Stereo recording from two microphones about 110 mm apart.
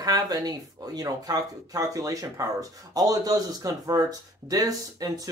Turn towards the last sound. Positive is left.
turn(degrees=-35)  # may be behind; listen again after turning